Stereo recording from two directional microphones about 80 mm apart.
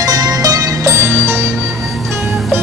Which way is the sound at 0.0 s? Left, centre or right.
Right.